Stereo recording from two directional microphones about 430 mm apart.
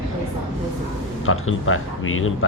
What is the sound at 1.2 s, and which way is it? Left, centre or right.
Speech, left.